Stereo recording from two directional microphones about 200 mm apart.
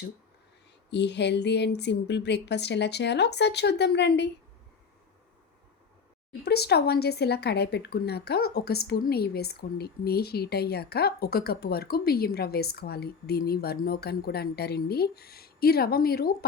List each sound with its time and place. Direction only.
0.9 s speech: 60° left (ahead or behind)
6.4 s speech: 55° left (ahead or behind)